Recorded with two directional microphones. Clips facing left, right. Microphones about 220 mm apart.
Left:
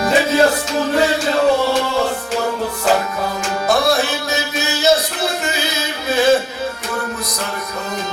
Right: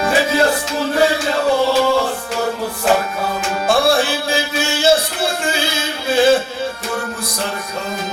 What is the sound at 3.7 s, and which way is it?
Music, 30° right (ahead or behind).